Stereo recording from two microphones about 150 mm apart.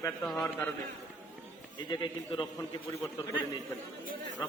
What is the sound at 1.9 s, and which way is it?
Speech, 30° left (ahead or behind).